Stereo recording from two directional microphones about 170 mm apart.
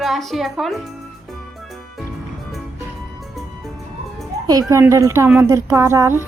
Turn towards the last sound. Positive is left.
turn(degrees=-15)  # may be behind; listen again after turning